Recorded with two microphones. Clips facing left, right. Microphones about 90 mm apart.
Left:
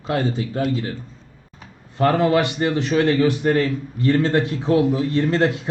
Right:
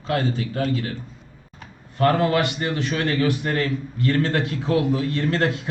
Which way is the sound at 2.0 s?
25° left (ahead or behind).